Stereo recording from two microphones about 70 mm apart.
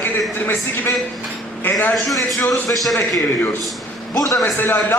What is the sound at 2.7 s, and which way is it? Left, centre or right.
Speech, centre.